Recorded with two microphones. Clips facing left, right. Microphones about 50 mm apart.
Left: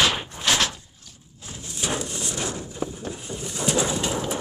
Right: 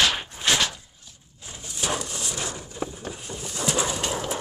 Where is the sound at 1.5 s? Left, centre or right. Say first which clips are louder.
Even; centre.